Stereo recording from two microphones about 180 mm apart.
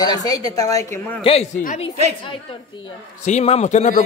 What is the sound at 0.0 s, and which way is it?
A woman's voice, 20° left (ahead or behind).